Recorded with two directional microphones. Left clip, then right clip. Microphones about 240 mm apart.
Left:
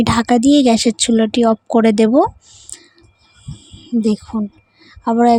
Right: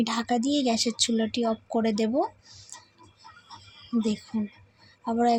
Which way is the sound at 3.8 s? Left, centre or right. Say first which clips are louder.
Left 11 dB; left.